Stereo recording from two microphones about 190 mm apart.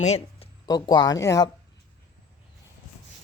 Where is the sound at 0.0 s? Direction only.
35° left (ahead or behind).